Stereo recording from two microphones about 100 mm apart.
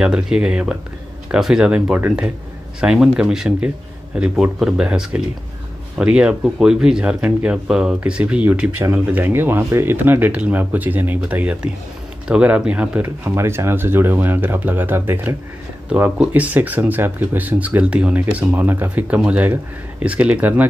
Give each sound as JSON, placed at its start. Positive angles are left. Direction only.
{"t": 0.0, "sound": "speech", "side_deg": -10}